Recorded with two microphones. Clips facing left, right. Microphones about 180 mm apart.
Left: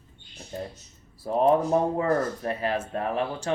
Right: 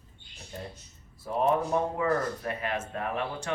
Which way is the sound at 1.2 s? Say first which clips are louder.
Left 5 dB; 35° left (ahead or behind).